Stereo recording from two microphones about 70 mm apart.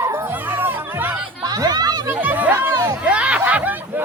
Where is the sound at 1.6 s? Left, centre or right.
Right.